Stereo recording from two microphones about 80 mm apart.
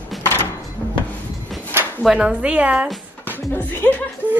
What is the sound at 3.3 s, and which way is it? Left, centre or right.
Speech, left.